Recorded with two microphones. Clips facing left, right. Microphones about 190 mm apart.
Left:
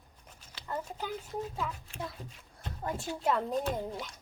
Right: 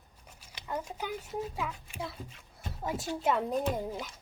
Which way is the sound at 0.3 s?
10° right (ahead or behind).